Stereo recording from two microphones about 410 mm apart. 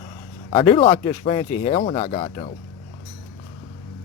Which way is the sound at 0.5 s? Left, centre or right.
Centre.